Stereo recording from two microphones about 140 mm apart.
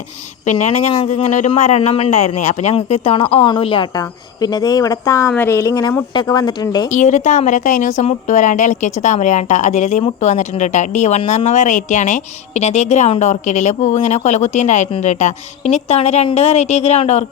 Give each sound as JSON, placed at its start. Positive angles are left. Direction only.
{"t": 0.4, "sound": "a man's voice", "side_deg": 55}
{"t": 3.9, "sound": "speech", "side_deg": 30}
{"t": 6.9, "sound": "a woman's voice", "side_deg": 60}